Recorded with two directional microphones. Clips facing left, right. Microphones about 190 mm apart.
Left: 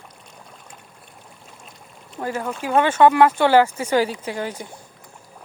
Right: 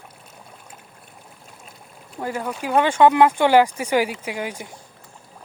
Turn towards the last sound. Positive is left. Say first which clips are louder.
# left 1 dB
turn(degrees=-15)  # may be behind; listen again after turning